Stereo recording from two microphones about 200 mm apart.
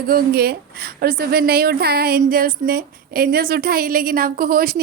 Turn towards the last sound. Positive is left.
turn(degrees=-45)  # may be behind; listen again after turning